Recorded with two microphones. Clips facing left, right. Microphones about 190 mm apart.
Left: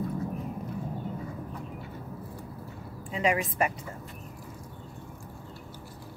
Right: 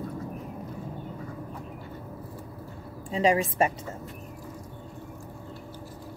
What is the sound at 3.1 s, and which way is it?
Speech, 30° right (ahead or behind).